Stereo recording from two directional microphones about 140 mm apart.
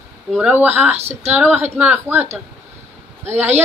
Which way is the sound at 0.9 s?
50° right (ahead or behind).